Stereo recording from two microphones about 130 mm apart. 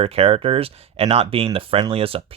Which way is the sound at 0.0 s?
50° right (ahead or behind).